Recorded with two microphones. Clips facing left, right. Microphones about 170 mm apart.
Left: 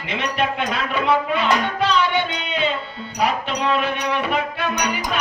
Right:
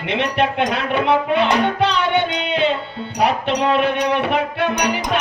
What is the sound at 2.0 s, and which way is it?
Music, 65° right (ahead or behind).